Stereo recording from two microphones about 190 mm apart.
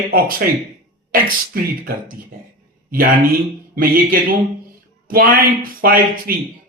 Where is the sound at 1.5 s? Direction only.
50° right (ahead or behind).